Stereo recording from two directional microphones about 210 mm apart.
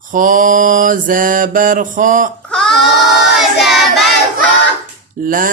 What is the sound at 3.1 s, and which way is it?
Choir, centre (ahead or behind).